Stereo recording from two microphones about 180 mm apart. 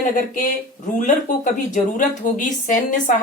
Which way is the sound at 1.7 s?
45° left (ahead or behind).